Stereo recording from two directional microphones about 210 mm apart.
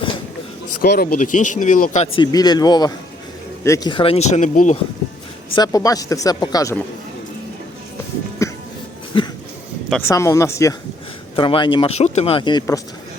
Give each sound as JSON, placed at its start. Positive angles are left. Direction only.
{"t": 0.8, "sound": "speech", "side_deg": 45}
{"t": 2.1, "sound": "speech", "side_deg": 20}
{"t": 5.5, "sound": "speech", "side_deg": 20}
{"t": 8.4, "sound": "music", "side_deg": 15}
{"t": 9.1, "sound": "a sound", "side_deg": 25}
{"t": 9.9, "sound": "speech", "side_deg": 10}